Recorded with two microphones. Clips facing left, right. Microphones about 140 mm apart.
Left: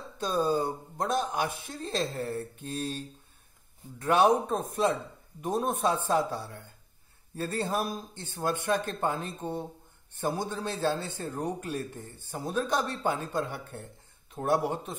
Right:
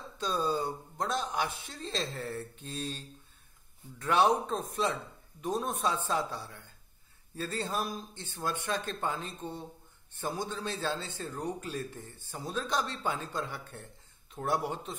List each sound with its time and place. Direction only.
0.2 s a man's voice: 50° left (ahead or behind)
4.0 s a man's voice: 50° left (ahead or behind)